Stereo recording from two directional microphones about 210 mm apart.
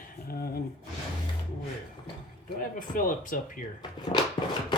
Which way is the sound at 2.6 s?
40° left (ahead or behind).